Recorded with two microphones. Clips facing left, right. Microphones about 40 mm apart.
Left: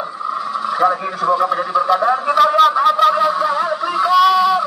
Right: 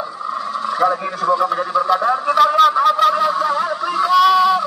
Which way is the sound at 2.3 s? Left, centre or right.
Centre.